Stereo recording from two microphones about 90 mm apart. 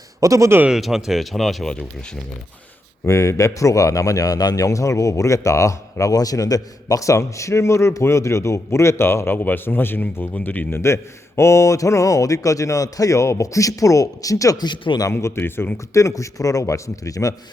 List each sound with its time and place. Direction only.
0.2 s speech: 35° right (ahead or behind)
0.7 s speech: 5° right (ahead or behind)
3.0 s a man's voice: 35° left (ahead or behind); by 10.8 s 20° left (ahead or behind)
10.8 s a man's voice: 30° left (ahead or behind); by 15.0 s 55° left (ahead or behind)
15.1 s a man's voice: 25° left (ahead or behind)